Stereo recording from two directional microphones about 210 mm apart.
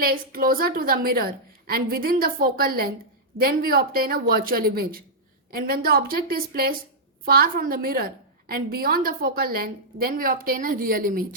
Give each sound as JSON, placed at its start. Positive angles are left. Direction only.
{"t": 0.0, "sound": "a woman's voice", "side_deg": -45}